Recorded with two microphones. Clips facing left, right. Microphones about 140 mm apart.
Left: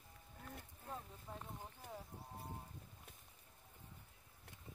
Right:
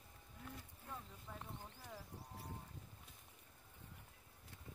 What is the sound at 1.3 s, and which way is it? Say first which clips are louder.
Speech: left 2 dB; 30° left (ahead or behind).